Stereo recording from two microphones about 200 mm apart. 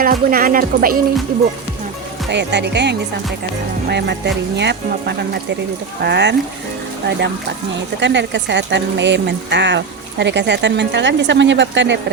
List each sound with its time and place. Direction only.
0.0 s speech: 45° right (ahead or behind)
2.3 s speech: 60° right (ahead or behind)
8.0 s speech: 60° right (ahead or behind)